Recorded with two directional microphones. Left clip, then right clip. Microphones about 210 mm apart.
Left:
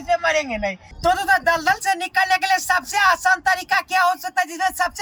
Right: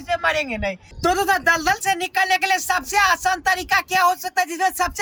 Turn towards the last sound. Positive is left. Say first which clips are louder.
# even
turn(degrees=-5)  # may be behind; listen again after turning